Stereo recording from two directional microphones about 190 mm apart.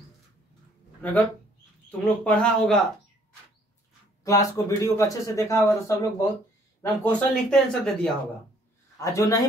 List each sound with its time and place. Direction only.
1.9 s speech: 5° left (ahead or behind)
4.2 s speech: 20° left (ahead or behind)
6.8 s speech: 5° left (ahead or behind)
8.9 s speech: 15° left (ahead or behind)